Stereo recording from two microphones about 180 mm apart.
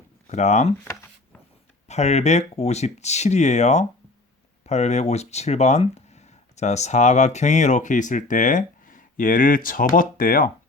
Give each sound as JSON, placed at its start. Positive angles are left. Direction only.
{"t": 0.3, "sound": "speech", "side_deg": 40}
{"t": 1.9, "sound": "speech", "side_deg": 40}